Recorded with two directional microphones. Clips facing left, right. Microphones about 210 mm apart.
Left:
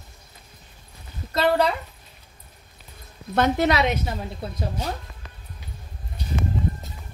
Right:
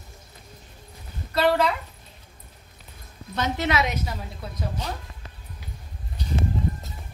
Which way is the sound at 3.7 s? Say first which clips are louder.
Left 3 dB; 30° left (ahead or behind).